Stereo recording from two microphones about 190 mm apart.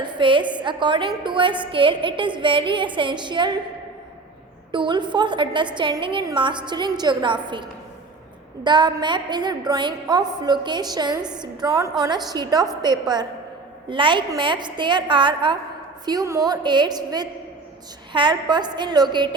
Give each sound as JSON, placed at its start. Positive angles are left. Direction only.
{"t": 0.0, "sound": "a woman's voice", "side_deg": -25}
{"t": 4.7, "sound": "a woman's voice", "side_deg": -25}